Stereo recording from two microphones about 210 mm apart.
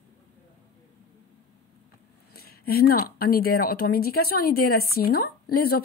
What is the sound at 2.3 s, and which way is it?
A woman's voice, 45° left (ahead or behind).